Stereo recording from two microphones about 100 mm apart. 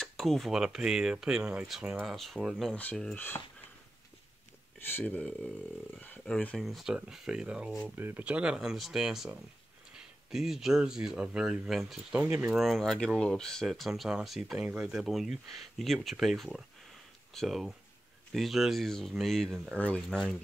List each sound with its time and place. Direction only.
0.0 s speech: centre (ahead or behind)
4.7 s speech: 20° left (ahead or behind)
6.6 s speech: centre (ahead or behind)
12.5 s speech: centre (ahead or behind)